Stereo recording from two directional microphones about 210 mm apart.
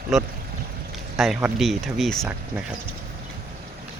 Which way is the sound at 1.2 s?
5° right (ahead or behind).